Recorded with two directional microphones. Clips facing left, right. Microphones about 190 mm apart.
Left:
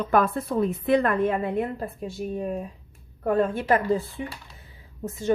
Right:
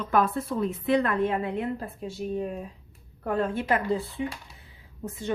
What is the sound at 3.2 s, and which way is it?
A woman's voice, 50° left (ahead or behind).